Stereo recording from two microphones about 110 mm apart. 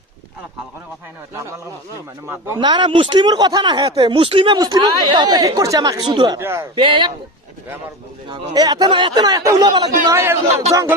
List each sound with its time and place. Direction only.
2.2 s a man's voice: 25° right (ahead or behind)
2.6 s speech: 45° right (ahead or behind)
4.5 s speech: 40° right (ahead or behind)
6.4 s a man's voice: 25° right (ahead or behind)
6.7 s speech: 50° right (ahead or behind)
8.3 s speech: 40° right (ahead or behind)
10.5 s speech: 75° right (ahead or behind)